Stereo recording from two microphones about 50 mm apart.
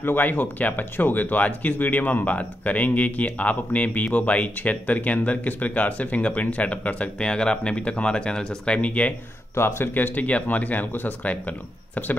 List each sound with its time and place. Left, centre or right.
0.0 s speech: left
9.6 s speech: left
9.9 s speech: left